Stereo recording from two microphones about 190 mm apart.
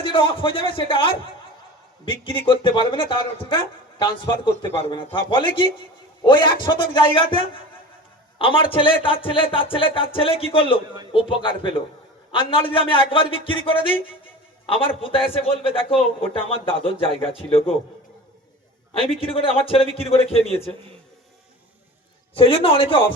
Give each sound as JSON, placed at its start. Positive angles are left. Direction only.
{"t": 0.0, "sound": "a man's voice", "side_deg": 25}
{"t": 8.4, "sound": "a man's voice", "side_deg": 25}
{"t": 19.2, "sound": "a man's voice", "side_deg": 30}
{"t": 22.4, "sound": "a man's voice", "side_deg": 30}